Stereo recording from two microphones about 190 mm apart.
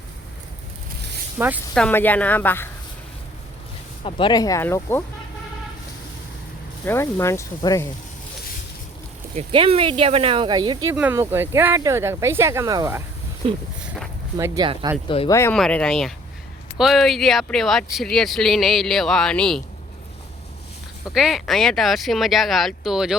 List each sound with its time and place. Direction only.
1.4 s speech: 10° right (ahead or behind)
1.7 s speech: 5° left (ahead or behind)
4.0 s speech: 25° left (ahead or behind)
6.8 s speech: 15° left (ahead or behind)
9.3 s speech: 30° right (ahead or behind)
10.9 s speech: 10° right (ahead or behind)
13.7 s a sound: 5° right (ahead or behind)
14.3 s speech: 15° right (ahead or behind)
15.0 s speech: 30° left (ahead or behind)
15.3 s speech: 15° left (ahead or behind)
15.5 s speech: 5° left (ahead or behind)
21.1 s speech: centre (ahead or behind)